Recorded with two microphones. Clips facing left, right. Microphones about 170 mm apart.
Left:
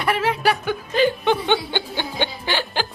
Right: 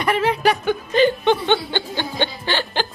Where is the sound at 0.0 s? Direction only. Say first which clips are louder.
Right 2 dB; 5° left (ahead or behind).